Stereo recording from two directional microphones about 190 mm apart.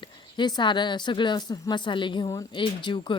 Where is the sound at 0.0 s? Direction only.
25° left (ahead or behind).